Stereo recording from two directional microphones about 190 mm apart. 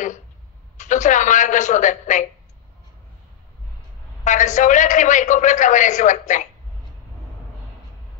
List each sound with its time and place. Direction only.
0.7 s a man's voice: 40° left (ahead or behind)
4.2 s a man's voice: 40° left (ahead or behind)